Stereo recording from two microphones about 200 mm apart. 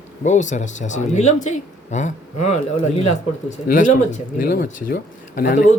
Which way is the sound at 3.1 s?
40° left (ahead or behind).